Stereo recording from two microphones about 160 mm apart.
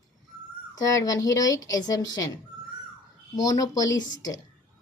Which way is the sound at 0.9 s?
20° left (ahead or behind).